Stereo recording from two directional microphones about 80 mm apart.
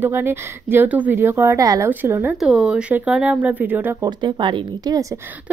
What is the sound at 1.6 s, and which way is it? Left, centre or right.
Speech, right.